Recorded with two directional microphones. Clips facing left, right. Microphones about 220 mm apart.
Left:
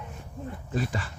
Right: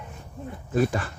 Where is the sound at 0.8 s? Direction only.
55° right (ahead or behind).